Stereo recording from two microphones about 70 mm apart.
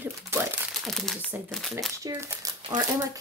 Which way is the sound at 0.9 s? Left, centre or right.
Centre.